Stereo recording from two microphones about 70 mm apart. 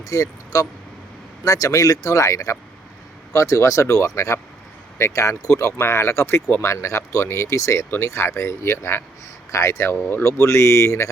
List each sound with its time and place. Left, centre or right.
0.0 s speech: left
10.1 s speech: left
10.4 s speech: left